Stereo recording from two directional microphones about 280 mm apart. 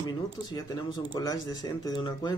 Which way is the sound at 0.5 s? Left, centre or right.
Centre.